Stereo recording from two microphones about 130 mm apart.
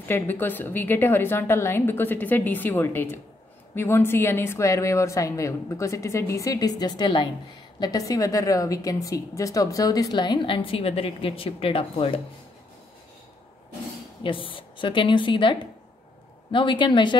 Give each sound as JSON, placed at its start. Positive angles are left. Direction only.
{"t": 0.1, "sound": "a woman's voice", "side_deg": 15}
{"t": 14.2, "sound": "a woman's voice", "side_deg": 40}